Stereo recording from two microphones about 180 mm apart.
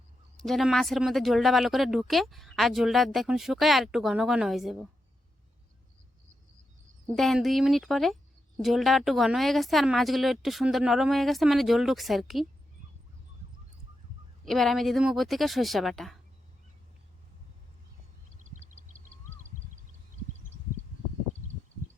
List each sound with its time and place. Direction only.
0.3 s speech: centre (ahead or behind)
7.2 s speech: centre (ahead or behind)
14.4 s speech: centre (ahead or behind)
18.4 s a sound: 45° right (ahead or behind)